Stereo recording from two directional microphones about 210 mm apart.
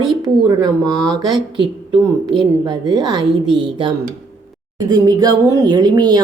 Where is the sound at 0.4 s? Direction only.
15° right (ahead or behind).